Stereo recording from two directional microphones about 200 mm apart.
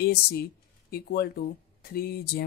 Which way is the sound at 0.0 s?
50° left (ahead or behind).